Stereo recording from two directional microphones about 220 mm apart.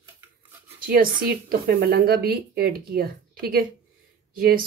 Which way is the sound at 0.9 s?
40° right (ahead or behind).